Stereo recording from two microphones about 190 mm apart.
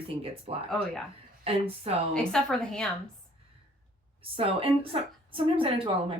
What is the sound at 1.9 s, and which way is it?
Speech, 30° right (ahead or behind).